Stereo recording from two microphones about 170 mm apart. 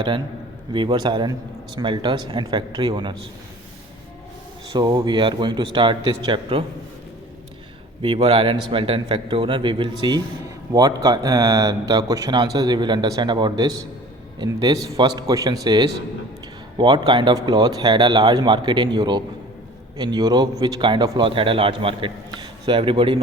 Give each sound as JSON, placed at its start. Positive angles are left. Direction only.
{"t": 0.7, "sound": "a man's voice", "side_deg": -30}
{"t": 4.7, "sound": "a man's voice", "side_deg": -25}
{"t": 8.0, "sound": "a man's voice", "side_deg": -30}